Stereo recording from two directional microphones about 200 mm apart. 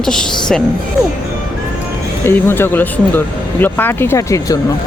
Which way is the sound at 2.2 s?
10° left (ahead or behind).